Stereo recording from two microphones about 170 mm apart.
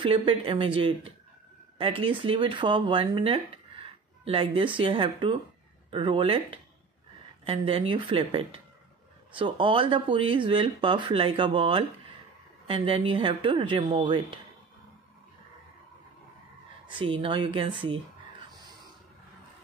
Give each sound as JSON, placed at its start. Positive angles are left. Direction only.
{"t": 0.0, "sound": "speech", "side_deg": -30}
{"t": 16.8, "sound": "speech", "side_deg": -30}